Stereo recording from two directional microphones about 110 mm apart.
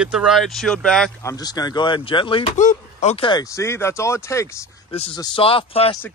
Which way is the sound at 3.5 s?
25° left (ahead or behind).